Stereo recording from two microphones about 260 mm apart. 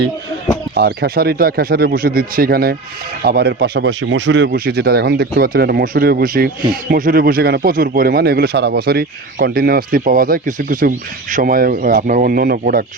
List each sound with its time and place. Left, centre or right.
0.7 s speech: right